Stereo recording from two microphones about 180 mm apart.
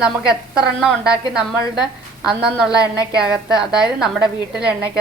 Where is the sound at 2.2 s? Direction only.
5° right (ahead or behind).